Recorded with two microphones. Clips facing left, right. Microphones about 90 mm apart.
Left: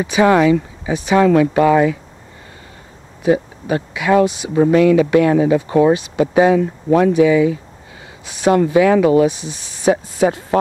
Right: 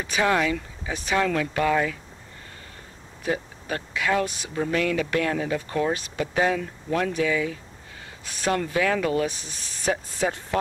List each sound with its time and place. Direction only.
0.0 s speech: 15° left (ahead or behind)
3.2 s speech: 10° left (ahead or behind)